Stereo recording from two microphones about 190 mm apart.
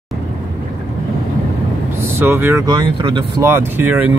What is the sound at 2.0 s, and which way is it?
Speech, 15° right (ahead or behind).